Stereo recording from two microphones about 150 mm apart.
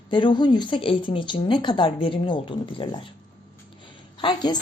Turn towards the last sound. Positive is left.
turn(degrees=30)  # may be behind; listen again after turning